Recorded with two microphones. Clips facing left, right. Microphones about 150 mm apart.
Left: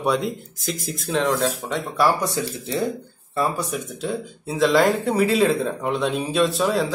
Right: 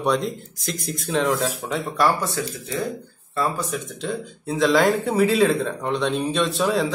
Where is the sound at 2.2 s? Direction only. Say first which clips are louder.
Left 2 dB; 20° left (ahead or behind).